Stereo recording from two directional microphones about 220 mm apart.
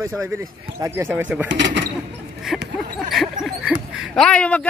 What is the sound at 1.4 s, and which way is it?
Speech, 55° right (ahead or behind).